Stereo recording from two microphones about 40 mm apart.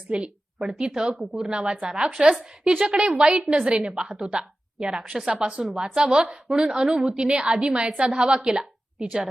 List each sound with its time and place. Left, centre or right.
0.1 s a woman's voice: centre